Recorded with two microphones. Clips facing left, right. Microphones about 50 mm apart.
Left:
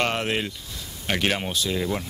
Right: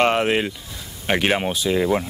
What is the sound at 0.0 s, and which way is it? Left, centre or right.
Speech, centre.